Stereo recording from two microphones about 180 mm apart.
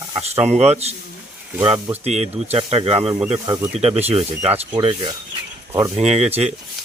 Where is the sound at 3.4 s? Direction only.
20° right (ahead or behind).